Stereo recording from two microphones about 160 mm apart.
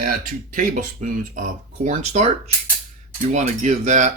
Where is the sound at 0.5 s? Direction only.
55° right (ahead or behind).